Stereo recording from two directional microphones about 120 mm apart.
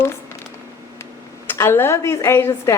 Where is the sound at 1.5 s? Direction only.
20° left (ahead or behind).